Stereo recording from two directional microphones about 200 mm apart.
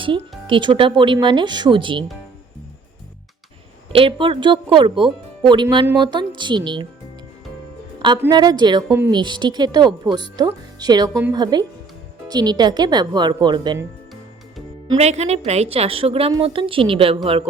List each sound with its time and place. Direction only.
0.0 s speech: 25° right (ahead or behind)
3.9 s speech: 25° right (ahead or behind)
8.3 s speech: 20° right (ahead or behind)
8.9 s speech: 10° right (ahead or behind)
9.1 s speech: 20° right (ahead or behind)
14.8 s speech: 30° right (ahead or behind)